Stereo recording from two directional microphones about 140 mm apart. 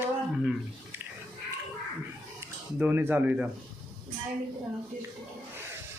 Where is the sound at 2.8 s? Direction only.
15° right (ahead or behind).